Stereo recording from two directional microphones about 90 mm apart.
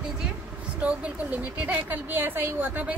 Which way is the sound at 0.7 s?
15° right (ahead or behind).